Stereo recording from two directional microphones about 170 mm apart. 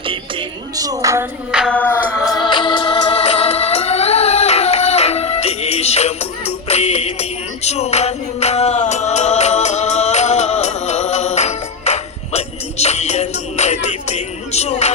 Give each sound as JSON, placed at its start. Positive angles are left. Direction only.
{"t": 0.8, "sound": "speech", "side_deg": -20}
{"t": 1.5, "sound": "music", "side_deg": 5}